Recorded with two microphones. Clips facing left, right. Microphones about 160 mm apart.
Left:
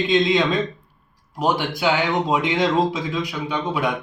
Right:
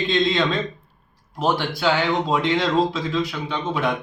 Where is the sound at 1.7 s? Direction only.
15° left (ahead or behind).